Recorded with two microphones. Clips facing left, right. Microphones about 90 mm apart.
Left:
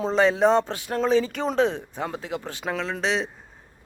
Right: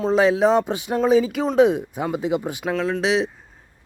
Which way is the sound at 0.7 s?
20° right (ahead or behind).